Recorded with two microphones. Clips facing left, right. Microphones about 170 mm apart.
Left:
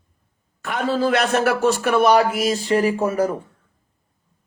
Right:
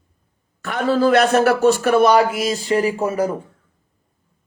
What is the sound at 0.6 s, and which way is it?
A man's voice, 50° right (ahead or behind).